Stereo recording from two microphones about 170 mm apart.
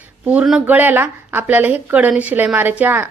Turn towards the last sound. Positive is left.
turn(degrees=-10)  # may be behind; listen again after turning